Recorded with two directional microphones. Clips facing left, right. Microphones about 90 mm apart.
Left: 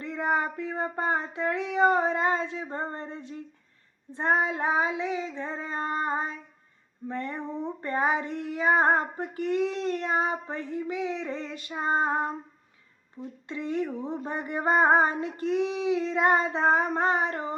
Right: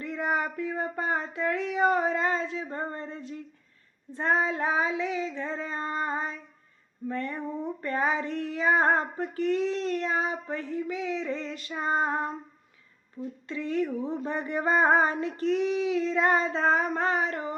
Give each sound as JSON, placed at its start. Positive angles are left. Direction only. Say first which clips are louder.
{"t": 0.0, "sound": "a sound", "louder": "left 1 dB", "side_deg": 25}
{"t": 4.1, "sound": "speech", "louder": "left 1 dB", "side_deg": 20}
{"t": 7.1, "sound": "female singing", "louder": "right 1 dB", "side_deg": 20}
{"t": 9.1, "sound": "speech", "louder": "right 1 dB", "side_deg": 15}
{"t": 13.5, "sound": "speech", "louder": "right 1 dB", "side_deg": 25}